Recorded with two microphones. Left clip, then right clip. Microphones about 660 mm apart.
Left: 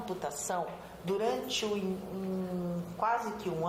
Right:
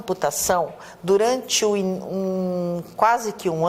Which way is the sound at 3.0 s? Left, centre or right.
Right.